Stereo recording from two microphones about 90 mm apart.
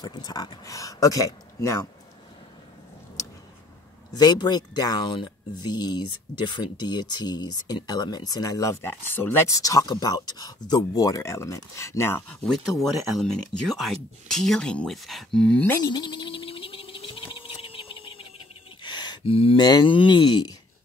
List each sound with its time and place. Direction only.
0.0 s speech: 50° left (ahead or behind)
4.1 s speech: 50° left (ahead or behind)
8.8 s speech: 25° left (ahead or behind)
12.3 s speech: 5° left (ahead or behind)
15.8 s frog: 50° left (ahead or behind); by 18.2 s 85° left
18.8 s a sound: 55° left (ahead or behind)
19.2 s a sound: 90° left
19.6 s speech: 60° left (ahead or behind)